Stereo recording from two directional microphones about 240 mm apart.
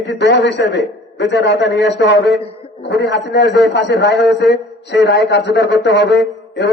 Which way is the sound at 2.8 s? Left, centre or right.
Left.